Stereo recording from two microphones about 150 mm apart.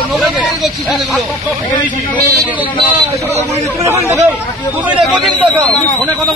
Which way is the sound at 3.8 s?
20° right (ahead or behind).